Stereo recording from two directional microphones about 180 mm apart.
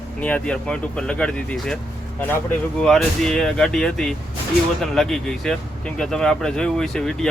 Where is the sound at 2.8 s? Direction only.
5° left (ahead or behind).